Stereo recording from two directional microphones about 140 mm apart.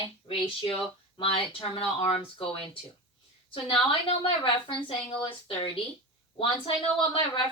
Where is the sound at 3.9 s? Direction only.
40° left (ahead or behind).